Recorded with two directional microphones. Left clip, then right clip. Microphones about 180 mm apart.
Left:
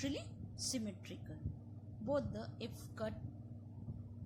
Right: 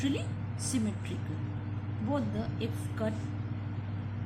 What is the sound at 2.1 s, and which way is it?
Speech, 45° left (ahead or behind).